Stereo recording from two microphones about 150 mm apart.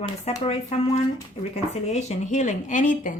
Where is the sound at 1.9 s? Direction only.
50° left (ahead or behind).